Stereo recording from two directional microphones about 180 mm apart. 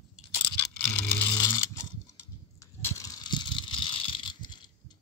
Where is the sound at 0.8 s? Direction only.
10° left (ahead or behind).